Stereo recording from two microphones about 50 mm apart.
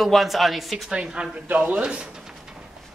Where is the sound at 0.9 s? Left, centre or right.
Centre.